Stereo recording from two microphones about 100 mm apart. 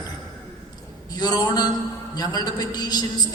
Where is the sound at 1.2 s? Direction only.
40° left (ahead or behind).